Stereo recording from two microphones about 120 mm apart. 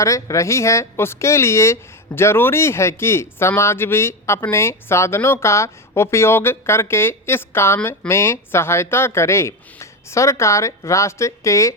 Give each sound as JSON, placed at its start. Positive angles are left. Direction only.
{"t": 0.0, "sound": "speech", "side_deg": 25}